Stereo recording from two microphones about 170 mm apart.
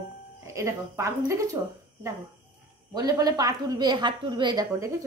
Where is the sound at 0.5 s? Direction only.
15° right (ahead or behind).